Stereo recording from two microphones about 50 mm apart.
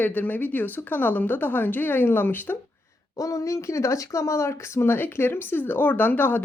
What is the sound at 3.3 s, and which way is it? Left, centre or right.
Speech, left.